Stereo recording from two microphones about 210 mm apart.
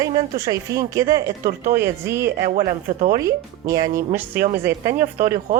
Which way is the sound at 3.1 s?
15° right (ahead or behind).